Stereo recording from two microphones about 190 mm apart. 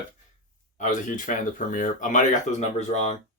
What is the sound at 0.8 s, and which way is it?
Speech, 40° left (ahead or behind).